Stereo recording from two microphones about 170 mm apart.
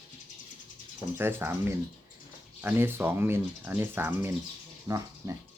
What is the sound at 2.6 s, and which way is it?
Speech, 10° right (ahead or behind).